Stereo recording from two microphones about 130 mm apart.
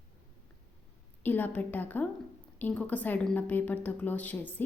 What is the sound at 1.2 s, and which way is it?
A woman's voice, 15° left (ahead or behind).